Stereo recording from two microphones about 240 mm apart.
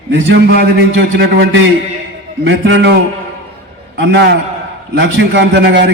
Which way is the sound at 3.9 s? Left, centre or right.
Right.